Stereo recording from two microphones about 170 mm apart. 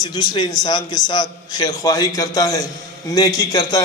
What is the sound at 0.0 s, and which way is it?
A man's voice, 25° left (ahead or behind).